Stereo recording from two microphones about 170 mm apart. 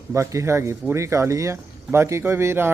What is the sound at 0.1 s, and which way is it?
Speech, 15° right (ahead or behind).